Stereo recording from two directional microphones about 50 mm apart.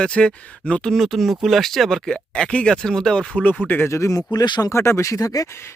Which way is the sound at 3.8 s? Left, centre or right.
Left.